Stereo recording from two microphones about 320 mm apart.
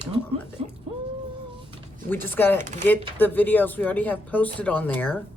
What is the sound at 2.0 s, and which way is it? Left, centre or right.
Speech, centre.